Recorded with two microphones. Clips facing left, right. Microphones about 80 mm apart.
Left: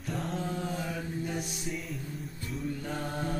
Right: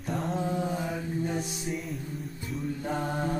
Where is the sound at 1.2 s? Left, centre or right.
Right.